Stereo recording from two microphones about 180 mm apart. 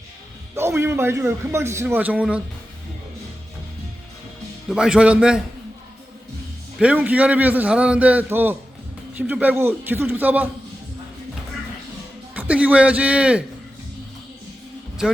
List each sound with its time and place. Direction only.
0.5 s a man's voice: 15° right (ahead or behind)
4.7 s a man's voice: 5° right (ahead or behind)
6.7 s a man's voice: 5° right (ahead or behind)
12.3 s a man's voice: 10° right (ahead or behind)
15.0 s speech: 5° right (ahead or behind)